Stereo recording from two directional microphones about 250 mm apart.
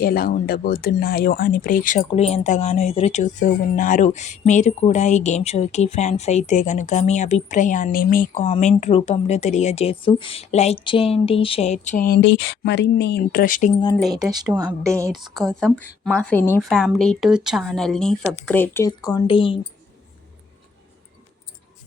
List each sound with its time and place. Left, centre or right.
0.0 s speech: left
14.2 s speech: centre
15.2 s a woman's voice: centre